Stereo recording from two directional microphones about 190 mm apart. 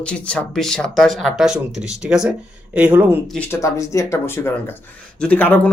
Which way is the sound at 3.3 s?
10° left (ahead or behind).